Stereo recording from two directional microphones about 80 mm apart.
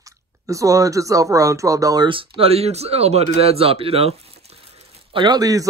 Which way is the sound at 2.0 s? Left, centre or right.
Right.